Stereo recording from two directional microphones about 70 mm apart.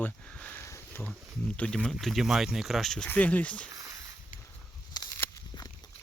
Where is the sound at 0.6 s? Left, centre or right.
Left.